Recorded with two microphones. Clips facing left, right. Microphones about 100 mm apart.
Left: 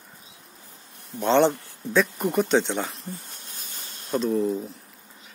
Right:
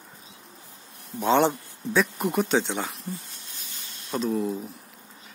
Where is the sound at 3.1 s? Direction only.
45° left (ahead or behind).